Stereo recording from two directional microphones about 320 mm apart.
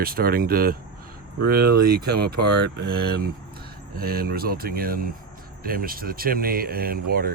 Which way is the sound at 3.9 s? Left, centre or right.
Right.